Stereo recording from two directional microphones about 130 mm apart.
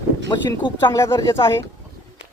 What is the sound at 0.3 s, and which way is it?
Speech, 35° left (ahead or behind).